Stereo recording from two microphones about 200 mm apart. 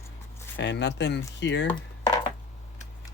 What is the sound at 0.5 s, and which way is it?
Speech, 60° left (ahead or behind).